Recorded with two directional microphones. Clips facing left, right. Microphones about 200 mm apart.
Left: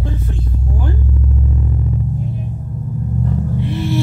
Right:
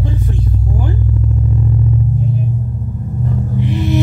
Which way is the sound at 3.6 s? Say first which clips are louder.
Right 5 dB; 15° right (ahead or behind).